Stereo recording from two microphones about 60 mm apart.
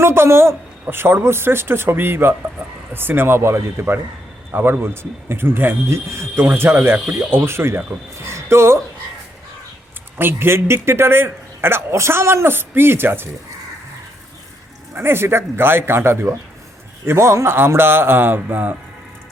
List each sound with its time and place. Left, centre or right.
0.0 s a man's voice: right
10.2 s a man's voice: right
14.9 s a man's voice: right